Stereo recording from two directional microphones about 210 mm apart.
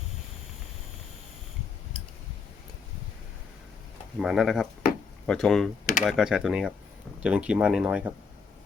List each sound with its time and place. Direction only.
4.2 s speech: centre (ahead or behind)
5.8 s speech: 40° left (ahead or behind)
6.1 s speech: centre (ahead or behind)